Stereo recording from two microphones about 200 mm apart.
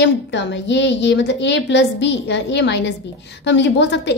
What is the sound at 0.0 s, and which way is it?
A woman's voice, 60° left (ahead or behind).